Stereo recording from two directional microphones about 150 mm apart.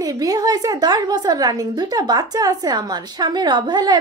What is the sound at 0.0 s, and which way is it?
A woman's voice, 25° right (ahead or behind).